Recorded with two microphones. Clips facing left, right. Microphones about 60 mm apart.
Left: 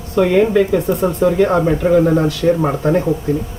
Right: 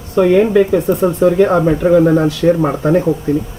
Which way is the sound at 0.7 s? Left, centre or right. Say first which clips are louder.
Right 2 dB; right.